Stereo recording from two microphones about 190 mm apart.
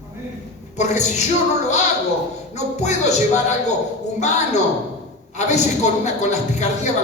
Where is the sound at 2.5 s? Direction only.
35° left (ahead or behind).